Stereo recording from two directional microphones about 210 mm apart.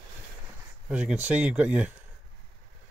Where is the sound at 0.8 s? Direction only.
5° right (ahead or behind).